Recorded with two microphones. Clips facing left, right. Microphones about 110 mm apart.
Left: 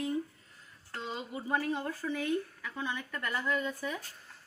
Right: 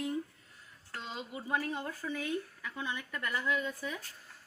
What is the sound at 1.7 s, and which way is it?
Speech, 5° right (ahead or behind).